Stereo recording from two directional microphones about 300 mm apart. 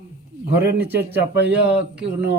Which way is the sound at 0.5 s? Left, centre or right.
Centre.